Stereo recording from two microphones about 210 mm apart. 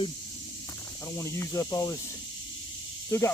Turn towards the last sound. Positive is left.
turn(degrees=15)  # may be behind; listen again after turning